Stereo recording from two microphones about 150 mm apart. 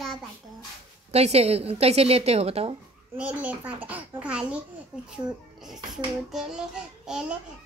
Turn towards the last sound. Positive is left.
turn(degrees=-5)  # may be behind; listen again after turning